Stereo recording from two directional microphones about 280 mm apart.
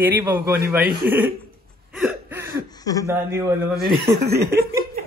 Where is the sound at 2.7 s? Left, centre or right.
Centre.